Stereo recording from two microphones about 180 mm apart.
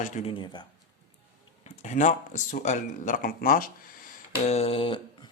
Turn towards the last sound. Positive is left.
turn(degrees=30)  # may be behind; listen again after turning